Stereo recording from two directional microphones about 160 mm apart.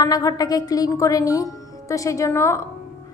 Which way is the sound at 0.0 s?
25° left (ahead or behind).